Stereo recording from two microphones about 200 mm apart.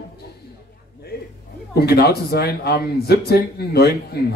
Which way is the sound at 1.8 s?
50° left (ahead or behind).